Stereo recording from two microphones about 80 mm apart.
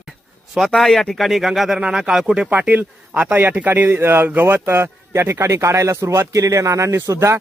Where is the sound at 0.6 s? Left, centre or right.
Centre.